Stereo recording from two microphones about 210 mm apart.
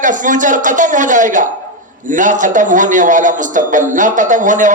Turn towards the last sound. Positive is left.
turn(degrees=-35)  # may be behind; listen again after turning